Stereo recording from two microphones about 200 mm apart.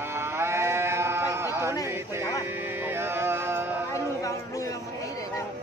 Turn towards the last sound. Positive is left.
turn(degrees=15)  # may be behind; listen again after turning